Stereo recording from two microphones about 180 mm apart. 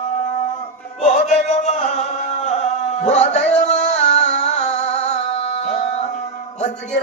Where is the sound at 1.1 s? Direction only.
40° left (ahead or behind).